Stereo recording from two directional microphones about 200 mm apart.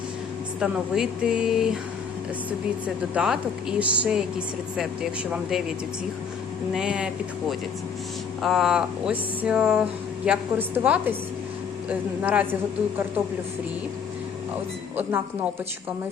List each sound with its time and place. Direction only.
0.6 s speech: 5° right (ahead or behind)
6.7 s speech: 5° right (ahead or behind)
8.4 s a woman's voice: centre (ahead or behind)